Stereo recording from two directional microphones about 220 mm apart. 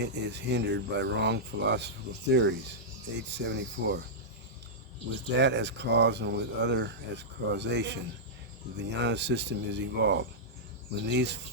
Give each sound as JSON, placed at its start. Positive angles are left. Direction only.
{"t": 0.0, "sound": "speech", "side_deg": -50}
{"t": 5.4, "sound": "speech", "side_deg": -50}